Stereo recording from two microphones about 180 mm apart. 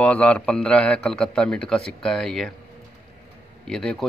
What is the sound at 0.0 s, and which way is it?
Speech, 5° left (ahead or behind).